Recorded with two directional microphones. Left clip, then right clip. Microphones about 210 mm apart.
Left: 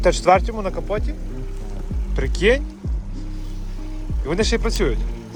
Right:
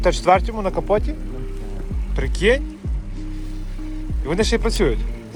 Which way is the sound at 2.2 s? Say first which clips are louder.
Even; 20° left (ahead or behind).